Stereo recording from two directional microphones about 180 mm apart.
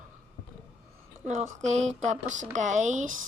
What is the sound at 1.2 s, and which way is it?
Speech, 40° right (ahead or behind).